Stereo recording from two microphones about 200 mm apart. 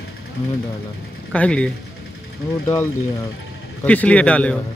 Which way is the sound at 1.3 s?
5° left (ahead or behind).